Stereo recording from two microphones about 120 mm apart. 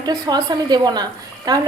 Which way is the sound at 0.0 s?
35° right (ahead or behind).